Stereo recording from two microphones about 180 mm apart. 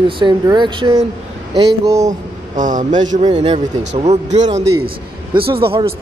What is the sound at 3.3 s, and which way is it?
Speech, 35° right (ahead or behind).